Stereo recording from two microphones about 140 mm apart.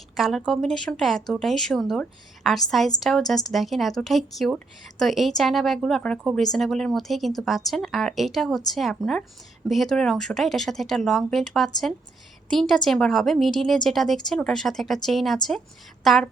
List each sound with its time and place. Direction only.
0.2 s a woman's voice: centre (ahead or behind)